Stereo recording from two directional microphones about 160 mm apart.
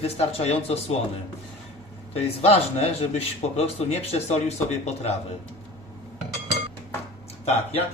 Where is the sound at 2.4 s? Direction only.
40° left (ahead or behind).